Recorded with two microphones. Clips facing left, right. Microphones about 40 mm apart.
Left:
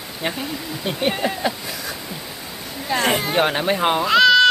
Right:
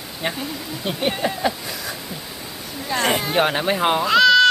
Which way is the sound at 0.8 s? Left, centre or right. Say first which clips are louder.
Left 1 dB; centre.